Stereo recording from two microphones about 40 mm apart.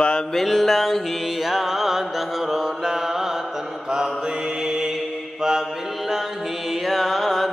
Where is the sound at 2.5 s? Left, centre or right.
Centre.